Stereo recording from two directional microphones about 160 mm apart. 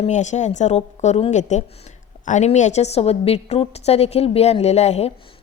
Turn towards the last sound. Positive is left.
turn(degrees=40)  # may be behind; listen again after turning